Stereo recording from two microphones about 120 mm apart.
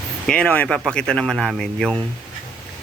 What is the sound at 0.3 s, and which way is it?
Speech, 10° left (ahead or behind).